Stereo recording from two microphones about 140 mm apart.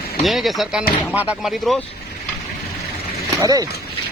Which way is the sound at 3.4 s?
25° right (ahead or behind).